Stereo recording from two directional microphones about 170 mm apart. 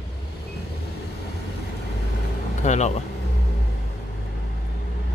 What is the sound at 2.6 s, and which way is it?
Vehicle, 40° left (ahead or behind).